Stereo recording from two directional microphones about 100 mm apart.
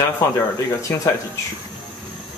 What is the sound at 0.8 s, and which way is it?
Speech, 30° left (ahead or behind).